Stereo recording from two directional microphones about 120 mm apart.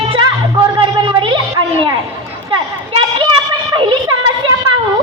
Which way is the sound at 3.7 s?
40° right (ahead or behind).